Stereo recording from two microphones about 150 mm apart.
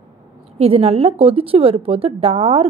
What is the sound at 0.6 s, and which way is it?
A woman's voice, 40° right (ahead or behind).